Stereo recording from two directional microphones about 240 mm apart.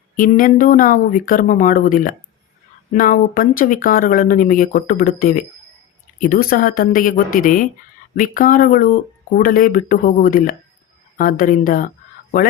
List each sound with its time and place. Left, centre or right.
0.2 s speech: left